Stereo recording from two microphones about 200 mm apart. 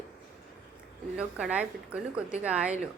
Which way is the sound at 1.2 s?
5° right (ahead or behind).